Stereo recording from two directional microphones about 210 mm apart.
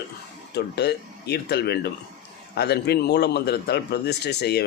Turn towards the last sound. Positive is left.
turn(degrees=50)  # may be behind; listen again after turning